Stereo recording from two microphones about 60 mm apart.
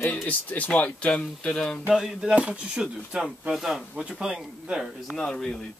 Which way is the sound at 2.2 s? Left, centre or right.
Centre.